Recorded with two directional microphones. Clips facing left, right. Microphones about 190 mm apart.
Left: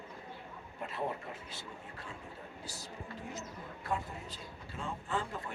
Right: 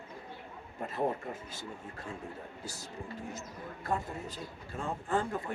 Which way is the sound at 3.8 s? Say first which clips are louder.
Right 3 dB; 45° right (ahead or behind).